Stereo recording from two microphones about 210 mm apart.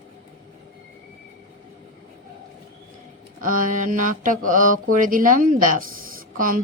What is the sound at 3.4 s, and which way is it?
Mantra, 40° right (ahead or behind).